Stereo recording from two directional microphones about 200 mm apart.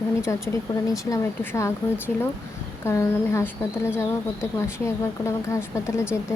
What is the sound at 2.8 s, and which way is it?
A woman's voice, 15° left (ahead or behind).